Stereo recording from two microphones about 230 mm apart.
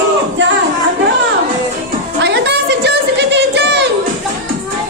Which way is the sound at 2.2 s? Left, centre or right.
Right.